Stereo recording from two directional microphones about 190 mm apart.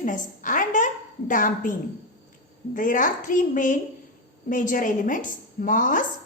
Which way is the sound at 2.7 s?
45° left (ahead or behind).